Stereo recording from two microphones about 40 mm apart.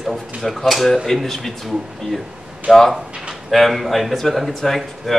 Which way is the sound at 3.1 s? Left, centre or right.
Right.